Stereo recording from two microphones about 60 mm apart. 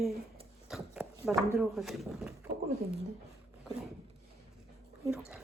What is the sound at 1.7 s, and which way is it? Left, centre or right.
Speech, centre.